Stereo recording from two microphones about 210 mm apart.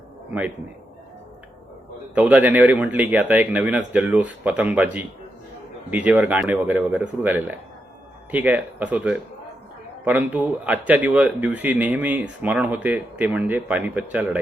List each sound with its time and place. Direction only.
2.1 s a man's voice: 5° right (ahead or behind)